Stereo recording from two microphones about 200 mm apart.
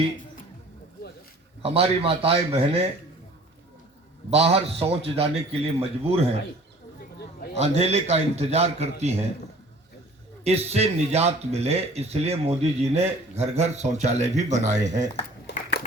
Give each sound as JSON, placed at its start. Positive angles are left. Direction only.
{"t": 1.6, "sound": "speech", "side_deg": -30}
{"t": 4.3, "sound": "speech", "side_deg": -30}
{"t": 7.5, "sound": "speech", "side_deg": -30}
{"t": 10.4, "sound": "speech", "side_deg": -30}